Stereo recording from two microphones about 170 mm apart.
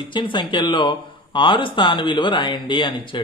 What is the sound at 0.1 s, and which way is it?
Speech, 30° left (ahead or behind).